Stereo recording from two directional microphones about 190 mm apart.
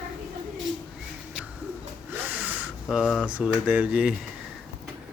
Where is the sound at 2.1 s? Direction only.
10° right (ahead or behind).